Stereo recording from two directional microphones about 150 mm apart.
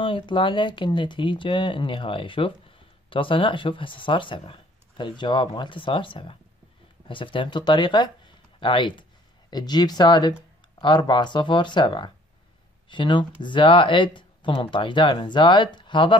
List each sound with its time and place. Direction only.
0.0 s speech: 35° left (ahead or behind)